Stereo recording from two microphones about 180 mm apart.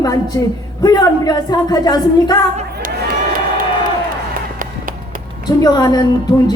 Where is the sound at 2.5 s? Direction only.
50° right (ahead or behind).